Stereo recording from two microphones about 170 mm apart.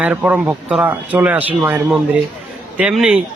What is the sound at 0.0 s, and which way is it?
A man's voice, 10° right (ahead or behind).